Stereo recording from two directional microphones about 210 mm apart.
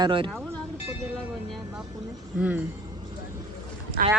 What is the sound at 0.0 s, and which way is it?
Speech, 25° right (ahead or behind).